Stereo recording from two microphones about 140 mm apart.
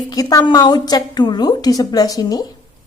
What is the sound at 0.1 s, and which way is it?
A woman's voice, 25° left (ahead or behind).